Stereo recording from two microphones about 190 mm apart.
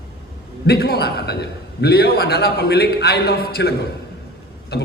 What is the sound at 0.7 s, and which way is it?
A man's voice, 55° left (ahead or behind).